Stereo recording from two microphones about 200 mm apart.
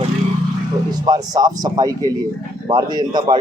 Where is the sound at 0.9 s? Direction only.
20° right (ahead or behind).